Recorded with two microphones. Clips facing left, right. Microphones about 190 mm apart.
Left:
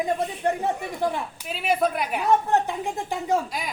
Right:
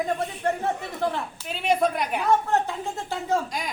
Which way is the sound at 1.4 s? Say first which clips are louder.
Right 1 dB; 5° left (ahead or behind).